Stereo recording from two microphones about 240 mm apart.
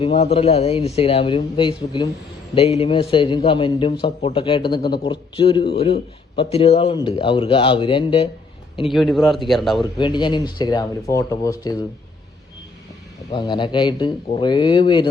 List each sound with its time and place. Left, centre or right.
0.0 s speech: left
8.9 s a man's voice: centre
10.0 s speech: centre
13.3 s speech: centre